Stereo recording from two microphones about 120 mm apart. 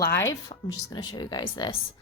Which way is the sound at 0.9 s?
40° left (ahead or behind).